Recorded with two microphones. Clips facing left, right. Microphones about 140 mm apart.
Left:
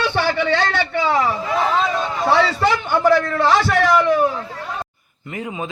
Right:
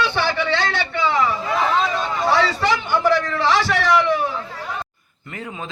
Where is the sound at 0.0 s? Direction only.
45° left (ahead or behind).